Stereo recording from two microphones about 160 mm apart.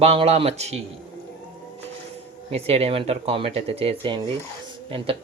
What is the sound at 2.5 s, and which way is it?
Speech, 40° right (ahead or behind).